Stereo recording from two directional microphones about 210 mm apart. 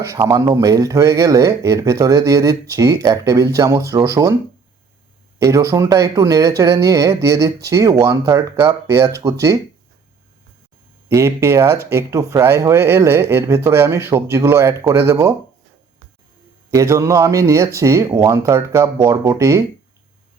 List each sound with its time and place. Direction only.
0.0 s speech: 15° right (ahead or behind)
5.4 s speech: 15° right (ahead or behind)
11.1 s speech: 15° right (ahead or behind)
16.7 s speech: 15° right (ahead or behind)